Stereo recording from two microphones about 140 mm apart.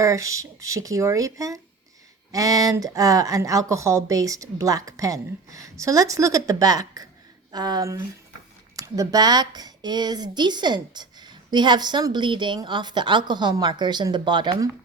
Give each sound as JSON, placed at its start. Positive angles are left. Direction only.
{"t": 0.0, "sound": "speech", "side_deg": -20}